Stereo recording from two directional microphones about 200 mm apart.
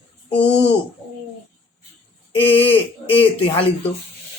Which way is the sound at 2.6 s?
25° left (ahead or behind).